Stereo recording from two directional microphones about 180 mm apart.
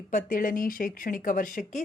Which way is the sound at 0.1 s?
45° left (ahead or behind).